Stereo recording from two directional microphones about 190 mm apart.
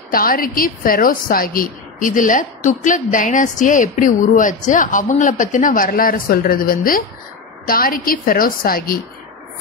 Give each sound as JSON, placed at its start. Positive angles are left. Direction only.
{"t": 0.1, "sound": "a woman's voice", "side_deg": 50}